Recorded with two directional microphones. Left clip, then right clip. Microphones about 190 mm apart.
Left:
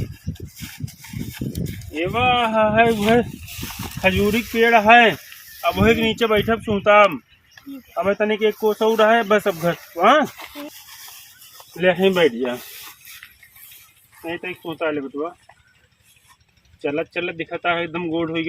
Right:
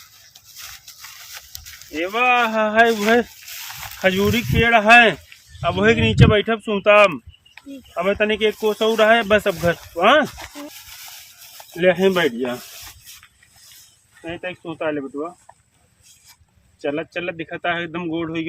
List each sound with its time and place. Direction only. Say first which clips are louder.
1.9 s speech: right 1 dB; 5° right (ahead or behind)
6.1 s speech: right 1 dB; 25° right (ahead or behind)
7.9 s speech: right 1 dB; 15° right (ahead or behind)
8.4 s speech: even; centre (ahead or behind)
9.0 s speech: right 2 dB; 20° right (ahead or behind)
9.4 s speech: right 1 dB; centre (ahead or behind)
9.9 s a sound: even; 5° right (ahead or behind)
11.8 s speech: even; 10° right (ahead or behind)
14.3 s speech: left 1 dB; centre (ahead or behind)
16.8 s speech: left 1 dB; 5° right (ahead or behind)